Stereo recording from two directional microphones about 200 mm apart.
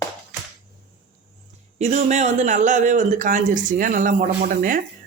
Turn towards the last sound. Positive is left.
turn(degrees=-40)  # may be behind; listen again after turning